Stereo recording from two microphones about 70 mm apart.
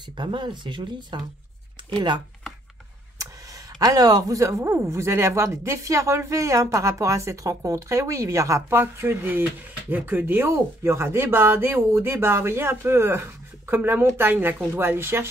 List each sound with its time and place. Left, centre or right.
0.2 s speech: right
3.8 s speech: right